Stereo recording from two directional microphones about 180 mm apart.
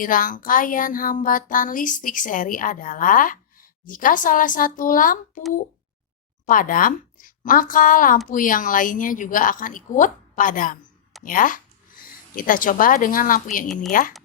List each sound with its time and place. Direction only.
0.0 s a woman's voice: 50° left (ahead or behind)
6.4 s a woman's voice: 50° left (ahead or behind)